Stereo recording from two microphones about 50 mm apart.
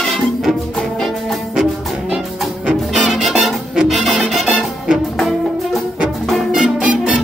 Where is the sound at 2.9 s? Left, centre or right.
Centre.